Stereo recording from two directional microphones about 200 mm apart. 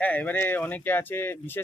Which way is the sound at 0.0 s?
10° left (ahead or behind).